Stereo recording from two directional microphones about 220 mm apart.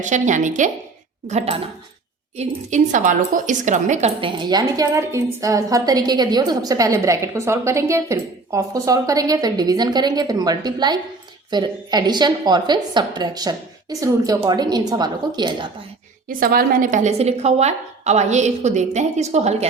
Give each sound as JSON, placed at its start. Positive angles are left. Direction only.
{"t": 0.0, "sound": "a woman's voice", "side_deg": -35}
{"t": 16.4, "sound": "a woman's voice", "side_deg": -40}